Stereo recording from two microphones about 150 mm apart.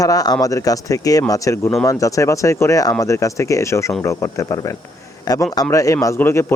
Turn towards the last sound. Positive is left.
turn(degrees=20)  # may be behind; listen again after turning